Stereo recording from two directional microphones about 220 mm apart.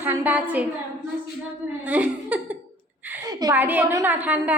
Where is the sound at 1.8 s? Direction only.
5° right (ahead or behind).